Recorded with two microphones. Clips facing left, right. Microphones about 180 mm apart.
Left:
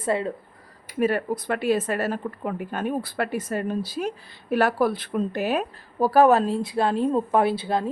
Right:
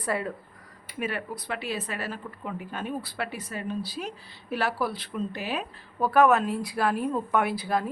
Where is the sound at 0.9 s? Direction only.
40° left (ahead or behind).